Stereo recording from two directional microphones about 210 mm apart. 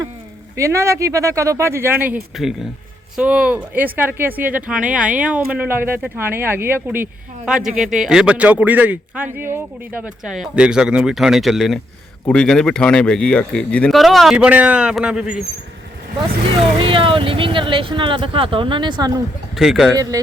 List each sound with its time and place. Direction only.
0.5 s speech: 15° right (ahead or behind)
16.6 s speech: 25° right (ahead or behind)
19.5 s speech: centre (ahead or behind)